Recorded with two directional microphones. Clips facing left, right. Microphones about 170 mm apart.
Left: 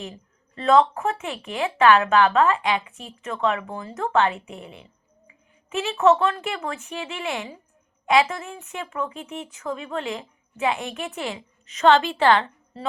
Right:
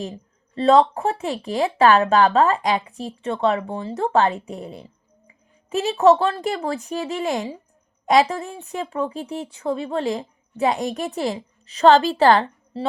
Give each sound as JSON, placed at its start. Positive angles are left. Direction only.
{"t": 0.5, "sound": "a woman's voice", "side_deg": -35}